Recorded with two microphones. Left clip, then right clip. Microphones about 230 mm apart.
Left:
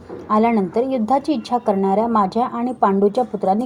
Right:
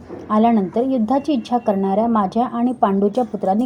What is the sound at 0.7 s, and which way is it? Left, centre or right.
A woman's voice, left.